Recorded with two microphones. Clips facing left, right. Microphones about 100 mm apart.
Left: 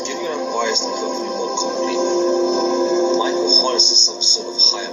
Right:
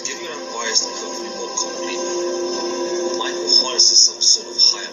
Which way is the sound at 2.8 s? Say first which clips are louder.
Left 5 dB; 40° left (ahead or behind).